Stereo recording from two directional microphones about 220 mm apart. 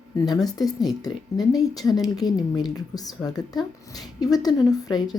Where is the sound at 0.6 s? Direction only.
Centre (ahead or behind).